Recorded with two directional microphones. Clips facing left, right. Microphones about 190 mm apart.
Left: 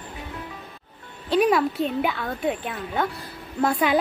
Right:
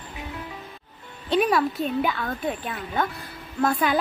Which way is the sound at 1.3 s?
5° left (ahead or behind).